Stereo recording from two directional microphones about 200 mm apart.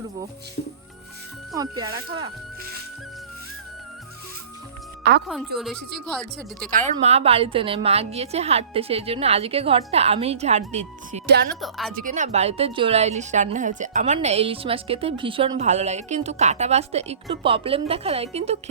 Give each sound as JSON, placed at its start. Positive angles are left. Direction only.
{"t": 1.5, "sound": "speech", "side_deg": -20}
{"t": 5.0, "sound": "speech", "side_deg": -55}
{"t": 5.5, "sound": "speech", "side_deg": 0}
{"t": 6.7, "sound": "a woman's voice", "side_deg": -40}
{"t": 11.6, "sound": "speech", "side_deg": 0}
{"t": 12.0, "sound": "a woman's voice", "side_deg": -35}